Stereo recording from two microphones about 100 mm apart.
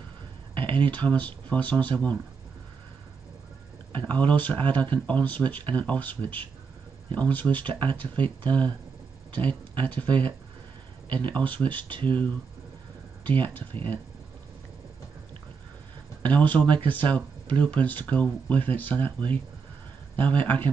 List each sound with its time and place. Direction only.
0.8 s speech: 15° left (ahead or behind)
3.9 s speech: 15° left (ahead or behind)
16.2 s speech: 15° left (ahead or behind)